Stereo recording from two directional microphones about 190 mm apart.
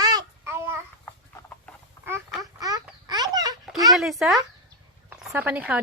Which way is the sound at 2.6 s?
20° right (ahead or behind).